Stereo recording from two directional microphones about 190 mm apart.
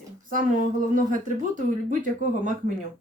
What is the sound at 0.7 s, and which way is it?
Speech, 45° right (ahead or behind).